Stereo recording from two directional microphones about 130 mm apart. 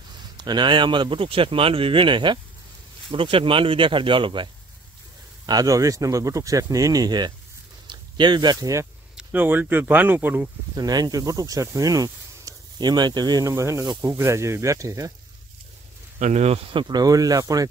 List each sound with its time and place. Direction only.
0.4 s speech: 35° right (ahead or behind)
5.5 s speech: 30° right (ahead or behind)
9.1 s speech: 15° right (ahead or behind)
10.8 s speech: 30° right (ahead or behind)
16.2 s speech: 60° right (ahead or behind)
16.8 s speech: 30° right (ahead or behind)